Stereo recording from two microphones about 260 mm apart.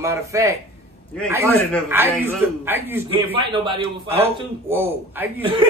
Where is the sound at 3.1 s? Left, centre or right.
Centre.